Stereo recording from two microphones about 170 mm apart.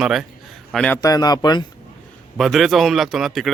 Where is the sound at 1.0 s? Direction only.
20° left (ahead or behind).